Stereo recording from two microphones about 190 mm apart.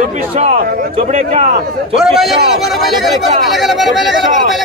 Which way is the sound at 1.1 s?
30° right (ahead or behind).